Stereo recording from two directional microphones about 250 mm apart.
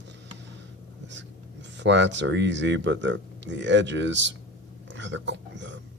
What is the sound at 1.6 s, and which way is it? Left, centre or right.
Speech, right.